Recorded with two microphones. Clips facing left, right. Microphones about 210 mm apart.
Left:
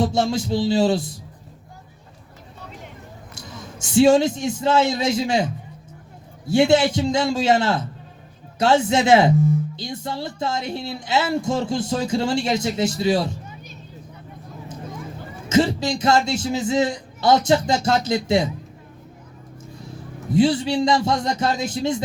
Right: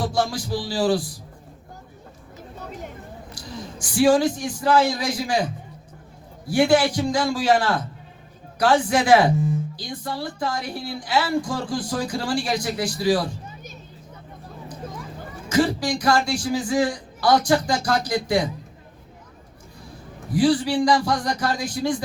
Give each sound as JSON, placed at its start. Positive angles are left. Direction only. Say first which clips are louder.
{"t": 0.0, "sound": "speech", "louder": "left 4 dB", "side_deg": 25}
{"t": 3.3, "sound": "a man's voice", "louder": "right 3 dB", "side_deg": 25}
{"t": 6.5, "sound": "speech", "louder": "left 2 dB", "side_deg": 25}
{"t": 15.4, "sound": "speech", "louder": "left 2 dB", "side_deg": 25}
{"t": 20.3, "sound": "speech", "louder": "left 1 dB", "side_deg": 25}